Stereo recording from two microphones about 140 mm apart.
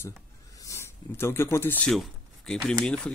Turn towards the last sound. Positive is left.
turn(degrees=5)  # may be behind; listen again after turning